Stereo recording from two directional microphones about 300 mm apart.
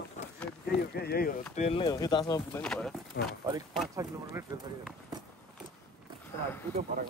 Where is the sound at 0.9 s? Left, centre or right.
Left.